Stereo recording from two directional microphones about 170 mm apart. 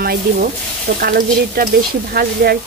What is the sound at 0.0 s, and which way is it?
Speech, 60° right (ahead or behind).